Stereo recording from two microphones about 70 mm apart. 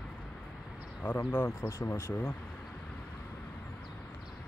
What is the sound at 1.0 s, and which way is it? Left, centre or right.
Speech, left.